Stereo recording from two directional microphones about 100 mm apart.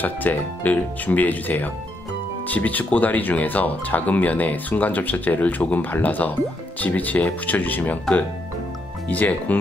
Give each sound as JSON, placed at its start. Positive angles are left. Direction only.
{"t": 0.0, "sound": "speech", "side_deg": 15}